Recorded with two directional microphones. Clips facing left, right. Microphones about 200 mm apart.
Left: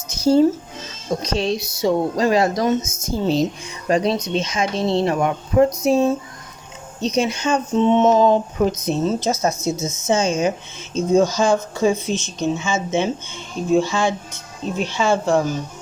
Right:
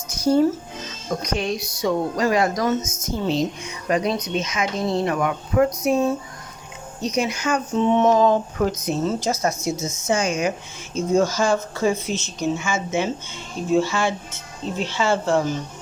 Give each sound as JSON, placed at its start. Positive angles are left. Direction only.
{"t": 0.1, "sound": "music", "side_deg": 25}
{"t": 1.2, "sound": "speech", "side_deg": 25}